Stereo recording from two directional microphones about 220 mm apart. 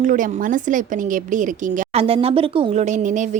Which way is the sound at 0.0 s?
35° right (ahead or behind).